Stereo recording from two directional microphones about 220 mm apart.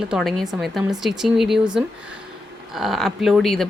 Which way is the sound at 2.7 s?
Centre (ahead or behind).